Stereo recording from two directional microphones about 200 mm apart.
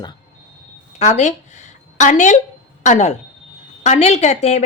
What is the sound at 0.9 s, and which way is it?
A woman's voice, 35° left (ahead or behind).